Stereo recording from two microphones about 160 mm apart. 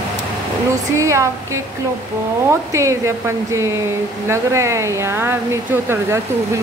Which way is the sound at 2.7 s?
20° right (ahead or behind).